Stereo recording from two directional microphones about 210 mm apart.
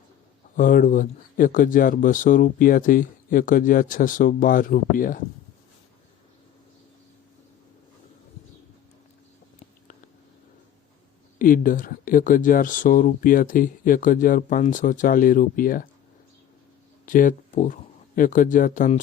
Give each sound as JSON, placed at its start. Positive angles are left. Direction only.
{"t": 0.5, "sound": "speech", "side_deg": 40}
{"t": 11.3, "sound": "speech", "side_deg": 40}
{"t": 17.1, "sound": "speech", "side_deg": 40}